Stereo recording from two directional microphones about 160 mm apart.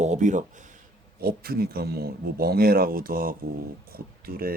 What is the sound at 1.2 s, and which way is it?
Speech, 70° right (ahead or behind).